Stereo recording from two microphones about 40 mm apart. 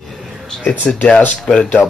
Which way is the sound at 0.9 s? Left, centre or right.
Centre.